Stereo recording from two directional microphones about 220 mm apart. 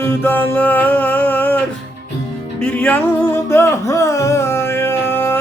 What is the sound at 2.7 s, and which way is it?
Music, 10° left (ahead or behind).